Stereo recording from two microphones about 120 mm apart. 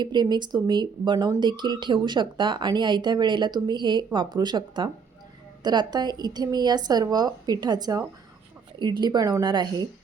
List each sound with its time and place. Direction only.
0.0 s speech: 40° right (ahead or behind)